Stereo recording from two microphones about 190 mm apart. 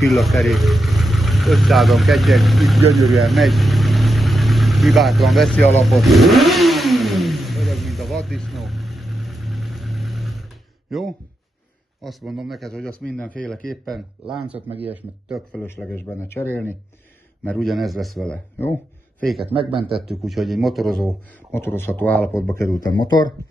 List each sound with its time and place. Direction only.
0.0 s speech: centre (ahead or behind)
2.9 s vehicle: centre (ahead or behind)
10.9 s speech: centre (ahead or behind)
14.8 s speech: 10° right (ahead or behind)
15.5 s speech: 10° left (ahead or behind)
19.5 s speech: 30° right (ahead or behind)
19.9 s speech: centre (ahead or behind)
21.5 s speech: 10° left (ahead or behind)